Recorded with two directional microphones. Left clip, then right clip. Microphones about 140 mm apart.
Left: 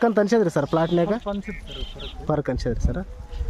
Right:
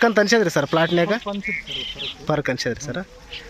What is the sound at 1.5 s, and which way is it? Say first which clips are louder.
Speech: right 10 dB; 55° left (ahead or behind).